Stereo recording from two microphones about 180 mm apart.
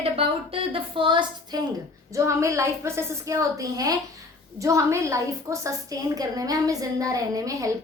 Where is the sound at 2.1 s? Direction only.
15° right (ahead or behind).